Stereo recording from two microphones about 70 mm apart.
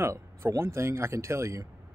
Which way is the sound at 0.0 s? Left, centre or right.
Right.